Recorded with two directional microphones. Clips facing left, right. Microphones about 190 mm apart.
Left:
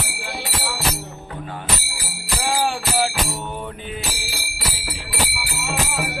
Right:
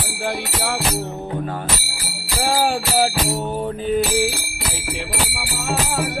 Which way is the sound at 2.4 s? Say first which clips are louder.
Right 3 dB; 40° right (ahead or behind).